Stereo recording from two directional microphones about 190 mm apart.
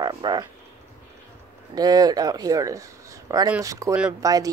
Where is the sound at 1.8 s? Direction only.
20° right (ahead or behind).